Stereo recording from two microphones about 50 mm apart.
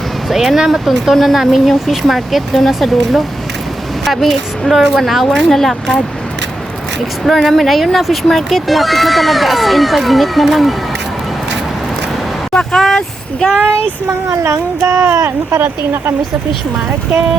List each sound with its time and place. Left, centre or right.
0.3 s speech: centre
7.3 s speech: centre
12.5 s speech: centre
14.4 s speech: right